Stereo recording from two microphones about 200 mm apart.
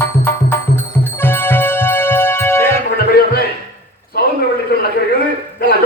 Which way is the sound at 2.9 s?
50° left (ahead or behind).